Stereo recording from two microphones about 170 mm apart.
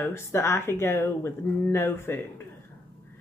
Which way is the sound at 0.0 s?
15° left (ahead or behind).